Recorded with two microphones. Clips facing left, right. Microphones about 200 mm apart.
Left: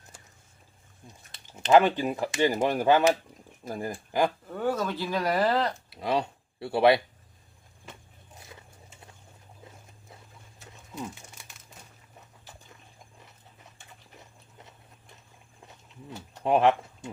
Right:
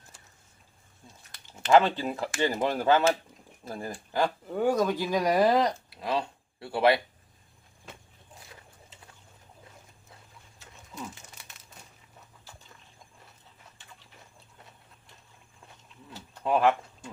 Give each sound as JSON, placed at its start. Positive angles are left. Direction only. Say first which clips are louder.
{"t": 1.0, "sound": "speech", "louder": "left 2 dB", "side_deg": 20}
{"t": 4.4, "sound": "speech", "louder": "right 4 dB", "side_deg": -15}
{"t": 5.9, "sound": "speech", "louder": "left 2 dB", "side_deg": 25}
{"t": 16.3, "sound": "pigeon", "louder": "left 2 dB", "side_deg": 20}